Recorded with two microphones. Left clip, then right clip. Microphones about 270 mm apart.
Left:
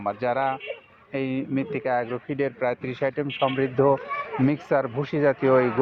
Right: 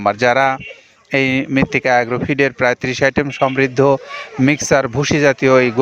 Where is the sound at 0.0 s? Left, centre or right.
Right.